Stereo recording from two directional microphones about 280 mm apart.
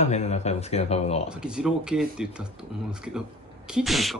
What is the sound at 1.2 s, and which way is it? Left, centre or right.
Speech, centre.